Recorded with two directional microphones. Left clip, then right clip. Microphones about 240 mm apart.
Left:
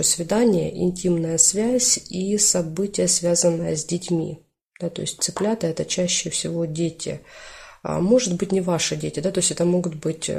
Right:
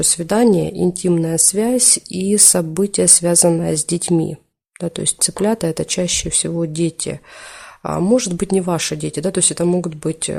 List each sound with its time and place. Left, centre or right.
0.0 s speech: right